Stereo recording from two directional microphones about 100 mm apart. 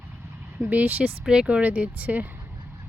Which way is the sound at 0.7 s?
15° right (ahead or behind).